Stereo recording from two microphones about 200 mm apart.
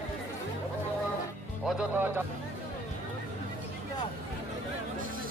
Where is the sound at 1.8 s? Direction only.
10° right (ahead or behind).